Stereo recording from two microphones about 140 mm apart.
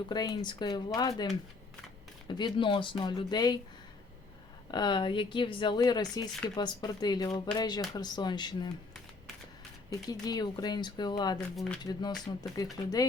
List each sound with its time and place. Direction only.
0.1 s speech: 30° left (ahead or behind)
4.7 s speech: 30° left (ahead or behind)
10.1 s speech: 30° left (ahead or behind)
11.3 s speech: 5° left (ahead or behind)
11.8 s speech: 30° left (ahead or behind)